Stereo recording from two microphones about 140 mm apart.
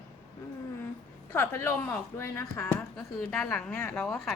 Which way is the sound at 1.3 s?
15° left (ahead or behind).